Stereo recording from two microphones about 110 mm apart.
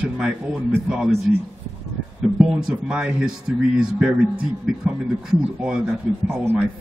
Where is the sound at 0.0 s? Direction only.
10° right (ahead or behind).